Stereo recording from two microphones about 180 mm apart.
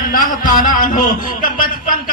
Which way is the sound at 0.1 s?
50° left (ahead or behind).